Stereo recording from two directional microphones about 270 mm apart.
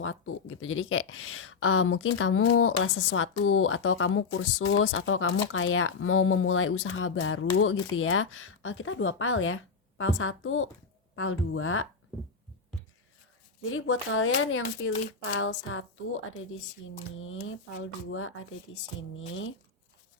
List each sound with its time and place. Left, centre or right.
0.6 s speech: left
13.7 s speech: left